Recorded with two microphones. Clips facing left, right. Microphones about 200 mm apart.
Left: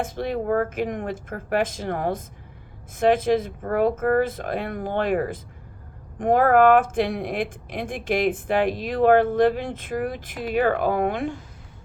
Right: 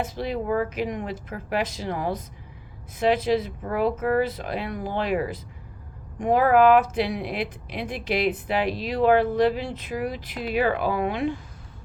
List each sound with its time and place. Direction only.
0.0 s speech: 50° left (ahead or behind)